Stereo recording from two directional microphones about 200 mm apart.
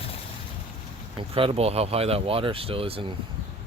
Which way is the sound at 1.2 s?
25° right (ahead or behind).